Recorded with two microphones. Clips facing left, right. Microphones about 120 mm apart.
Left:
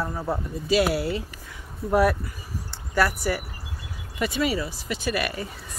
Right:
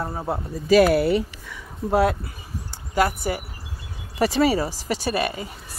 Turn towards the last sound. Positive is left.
turn(degrees=-25)  # may be behind; listen again after turning